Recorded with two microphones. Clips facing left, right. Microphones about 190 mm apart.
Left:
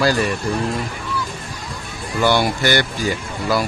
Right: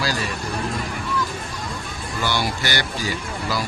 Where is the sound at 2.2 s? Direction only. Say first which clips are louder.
Left 8 dB; 55° left (ahead or behind).